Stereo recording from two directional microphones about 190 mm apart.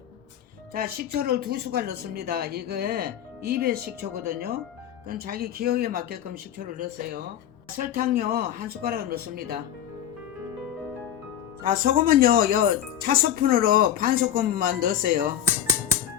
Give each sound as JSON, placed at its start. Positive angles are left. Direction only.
{"t": 0.7, "sound": "speech", "side_deg": -50}
{"t": 11.6, "sound": "speech", "side_deg": -45}